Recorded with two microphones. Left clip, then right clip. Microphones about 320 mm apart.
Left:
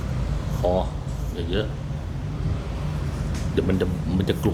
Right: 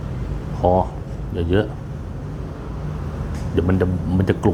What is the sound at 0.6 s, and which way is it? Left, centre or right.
Speech, right.